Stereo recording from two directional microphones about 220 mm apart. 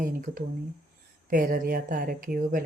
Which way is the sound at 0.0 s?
40° right (ahead or behind).